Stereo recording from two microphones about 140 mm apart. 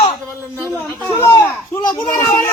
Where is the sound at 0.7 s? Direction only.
10° left (ahead or behind).